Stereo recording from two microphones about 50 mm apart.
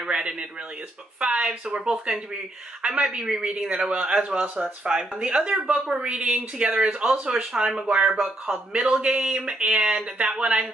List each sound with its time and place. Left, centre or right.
0.0 s speech: centre
8.0 s speech: right